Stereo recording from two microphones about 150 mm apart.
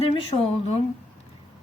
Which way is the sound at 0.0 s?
40° left (ahead or behind).